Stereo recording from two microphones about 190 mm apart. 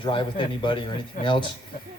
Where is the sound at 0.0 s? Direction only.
25° left (ahead or behind).